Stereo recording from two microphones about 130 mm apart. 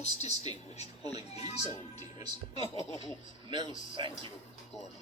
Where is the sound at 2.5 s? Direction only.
40° right (ahead or behind).